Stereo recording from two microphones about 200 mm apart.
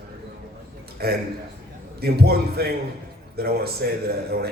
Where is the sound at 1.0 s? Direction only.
50° right (ahead or behind).